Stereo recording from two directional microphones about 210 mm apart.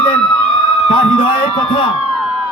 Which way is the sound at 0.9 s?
25° left (ahead or behind).